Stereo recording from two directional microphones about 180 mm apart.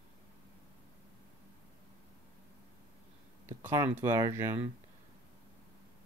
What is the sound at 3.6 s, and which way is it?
Speech, 15° right (ahead or behind).